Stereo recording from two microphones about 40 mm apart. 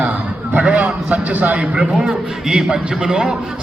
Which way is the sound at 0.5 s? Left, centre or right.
Right.